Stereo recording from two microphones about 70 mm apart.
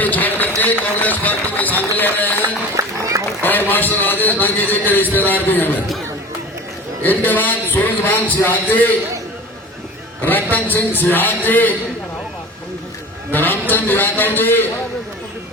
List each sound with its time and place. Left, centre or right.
0.0 s run: left
2.7 s run: right
3.4 s a man's voice: left
7.0 s a man's voice: left
10.2 s a man's voice: left
13.3 s a man's voice: left